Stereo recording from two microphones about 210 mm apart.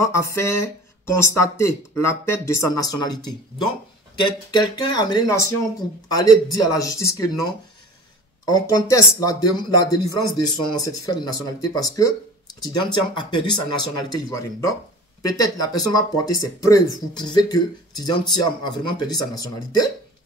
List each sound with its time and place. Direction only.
0.0 s speech: 15° left (ahead or behind)
8.5 s speech: 20° left (ahead or behind)